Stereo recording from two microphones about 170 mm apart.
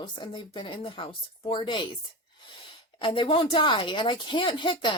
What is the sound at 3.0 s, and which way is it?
Speech, 30° left (ahead or behind).